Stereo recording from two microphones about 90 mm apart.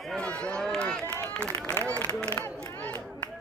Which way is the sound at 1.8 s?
20° left (ahead or behind).